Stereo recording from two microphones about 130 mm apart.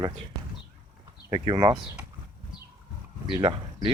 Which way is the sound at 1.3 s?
40° right (ahead or behind).